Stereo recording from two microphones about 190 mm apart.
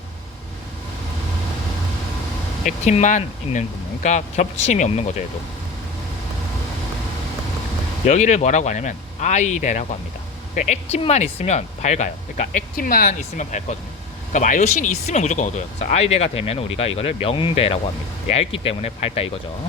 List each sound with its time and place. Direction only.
2.6 s speech: 40° left (ahead or behind)
8.0 s speech: 40° left (ahead or behind)